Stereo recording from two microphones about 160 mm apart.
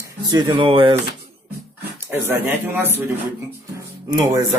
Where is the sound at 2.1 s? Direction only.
15° right (ahead or behind).